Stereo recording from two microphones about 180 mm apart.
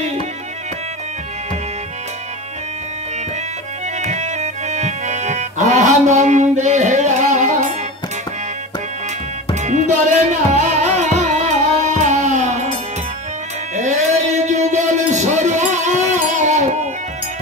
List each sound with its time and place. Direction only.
4.0 s music: 40° right (ahead or behind)
9.6 s music: 40° right (ahead or behind)
13.7 s a sound: 40° right (ahead or behind)